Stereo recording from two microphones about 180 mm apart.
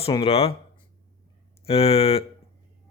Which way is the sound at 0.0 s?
30° left (ahead or behind).